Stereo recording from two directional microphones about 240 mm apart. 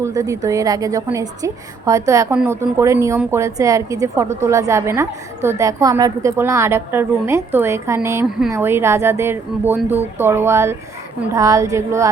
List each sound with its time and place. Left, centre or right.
0.0 s a woman's voice: centre